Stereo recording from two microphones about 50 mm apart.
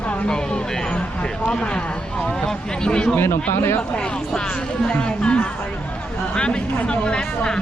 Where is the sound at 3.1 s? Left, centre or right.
Left.